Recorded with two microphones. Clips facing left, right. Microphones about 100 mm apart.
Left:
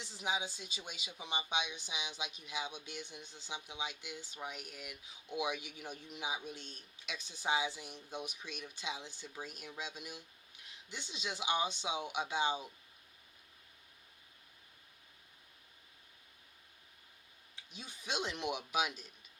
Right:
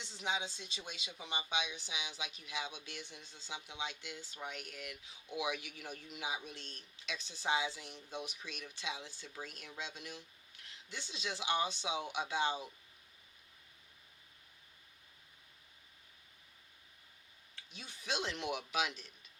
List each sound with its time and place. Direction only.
0.0 s speech: 5° left (ahead or behind)
17.5 s a man's voice: 15° left (ahead or behind)